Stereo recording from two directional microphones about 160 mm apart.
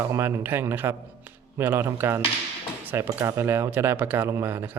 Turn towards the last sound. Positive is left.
turn(degrees=-15)  # may be behind; listen again after turning